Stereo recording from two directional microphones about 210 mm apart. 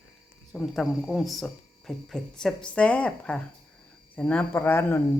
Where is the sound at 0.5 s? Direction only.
Centre (ahead or behind).